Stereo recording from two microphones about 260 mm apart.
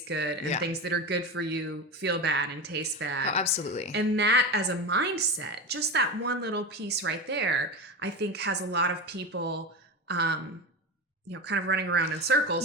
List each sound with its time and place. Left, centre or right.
0.1 s a woman's voice: right
3.3 s speech: left
3.9 s a woman's voice: right
10.1 s a sound: right
11.3 s a woman's voice: right